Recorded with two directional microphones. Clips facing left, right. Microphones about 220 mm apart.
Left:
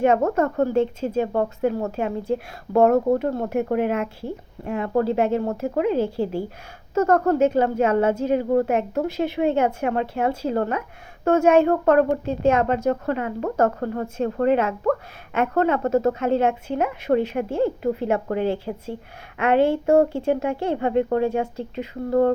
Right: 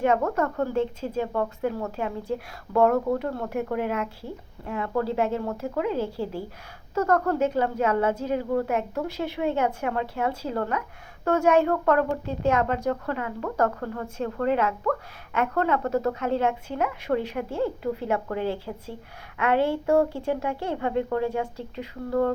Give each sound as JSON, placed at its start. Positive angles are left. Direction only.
{"t": 0.0, "sound": "a woman's voice", "side_deg": 25}